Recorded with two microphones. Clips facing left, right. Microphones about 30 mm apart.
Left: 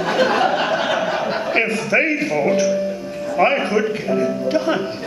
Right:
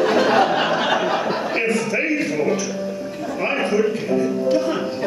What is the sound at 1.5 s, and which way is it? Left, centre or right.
A man's voice, centre.